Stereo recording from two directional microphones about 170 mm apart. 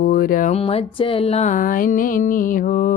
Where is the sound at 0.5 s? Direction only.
35° left (ahead or behind).